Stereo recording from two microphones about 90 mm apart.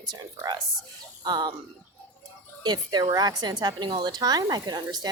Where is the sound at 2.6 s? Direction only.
50° right (ahead or behind).